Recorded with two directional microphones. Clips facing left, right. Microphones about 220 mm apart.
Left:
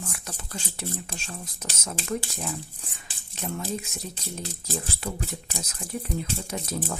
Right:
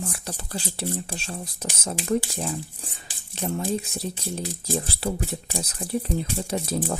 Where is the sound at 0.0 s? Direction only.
30° right (ahead or behind).